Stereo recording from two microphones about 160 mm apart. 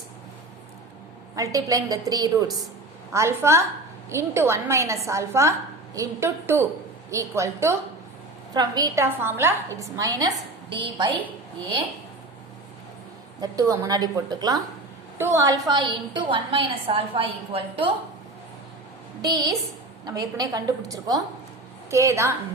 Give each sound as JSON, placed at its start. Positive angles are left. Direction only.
{"t": 1.4, "sound": "a woman's voice", "side_deg": -20}
{"t": 13.4, "sound": "a woman's voice", "side_deg": -20}
{"t": 19.2, "sound": "a woman's voice", "side_deg": -25}